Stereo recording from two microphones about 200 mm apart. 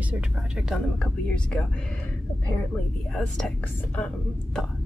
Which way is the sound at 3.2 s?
Centre (ahead or behind).